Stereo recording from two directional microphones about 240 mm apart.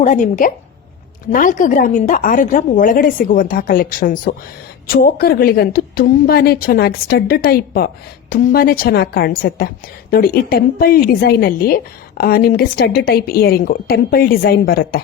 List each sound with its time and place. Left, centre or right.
0.0 s a woman's voice: left